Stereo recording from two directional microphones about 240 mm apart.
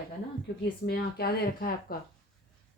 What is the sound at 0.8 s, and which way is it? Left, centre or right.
A woman's voice, left.